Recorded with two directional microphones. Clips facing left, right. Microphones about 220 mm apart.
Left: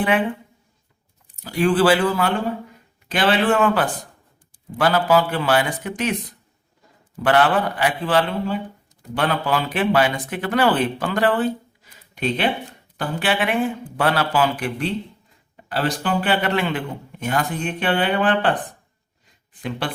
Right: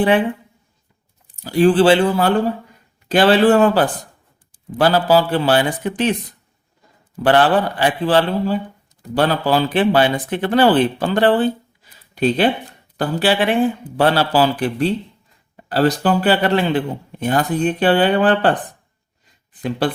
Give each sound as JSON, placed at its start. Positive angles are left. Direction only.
{"t": 1.5, "sound": "a man's voice", "side_deg": -30}
{"t": 7.2, "sound": "a man's voice", "side_deg": -35}